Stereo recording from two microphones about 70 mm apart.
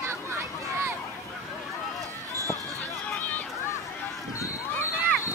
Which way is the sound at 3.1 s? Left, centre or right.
Left.